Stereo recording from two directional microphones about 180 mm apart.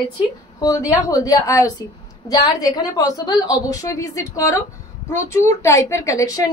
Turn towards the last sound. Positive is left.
turn(degrees=20)  # may be behind; listen again after turning